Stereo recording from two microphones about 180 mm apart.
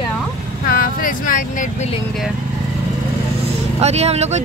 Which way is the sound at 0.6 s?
50° left (ahead or behind).